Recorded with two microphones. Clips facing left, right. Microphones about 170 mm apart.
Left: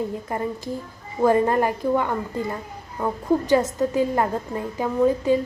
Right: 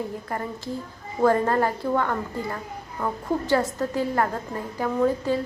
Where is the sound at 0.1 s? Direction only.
20° left (ahead or behind).